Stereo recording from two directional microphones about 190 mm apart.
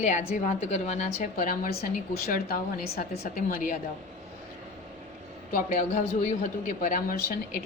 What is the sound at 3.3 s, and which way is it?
Speech, 45° left (ahead or behind).